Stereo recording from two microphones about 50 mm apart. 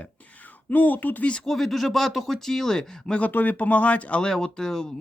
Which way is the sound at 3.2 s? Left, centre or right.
Left.